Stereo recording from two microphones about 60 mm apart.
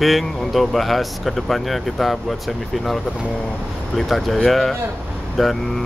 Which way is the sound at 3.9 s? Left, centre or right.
Centre.